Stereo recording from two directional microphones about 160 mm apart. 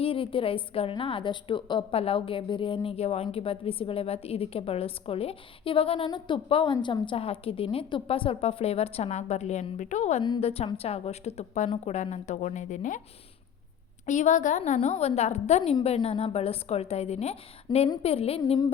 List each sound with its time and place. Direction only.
0.0 s a woman's voice: 35° left (ahead or behind)
10.2 s a woman's voice: 35° left (ahead or behind); by 13.0 s 50° left (ahead or behind)
14.1 s a woman's voice: 50° left (ahead or behind)